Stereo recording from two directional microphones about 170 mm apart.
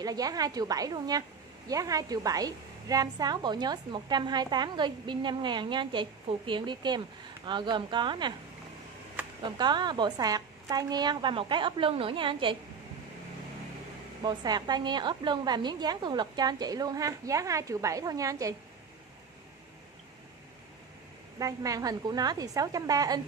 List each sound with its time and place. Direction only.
0.0 s a woman's voice: 20° right (ahead or behind)
9.6 s a woman's voice: 25° right (ahead or behind)
14.2 s a woman's voice: 25° right (ahead or behind)
21.4 s a woman's voice: 20° right (ahead or behind)